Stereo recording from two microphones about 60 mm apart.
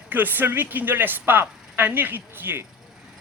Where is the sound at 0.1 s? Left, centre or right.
Right.